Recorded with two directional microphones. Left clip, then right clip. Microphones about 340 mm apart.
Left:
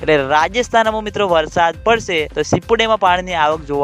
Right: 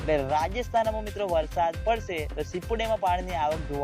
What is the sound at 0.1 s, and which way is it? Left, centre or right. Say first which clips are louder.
Speech: left 12 dB; left.